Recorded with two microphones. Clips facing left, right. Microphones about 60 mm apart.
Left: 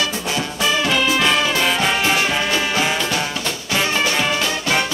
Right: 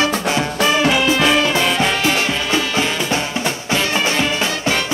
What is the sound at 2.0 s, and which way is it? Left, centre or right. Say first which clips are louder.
Music: right 1 dB; left.